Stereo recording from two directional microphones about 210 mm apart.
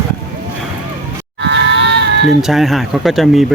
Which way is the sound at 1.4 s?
55° right (ahead or behind).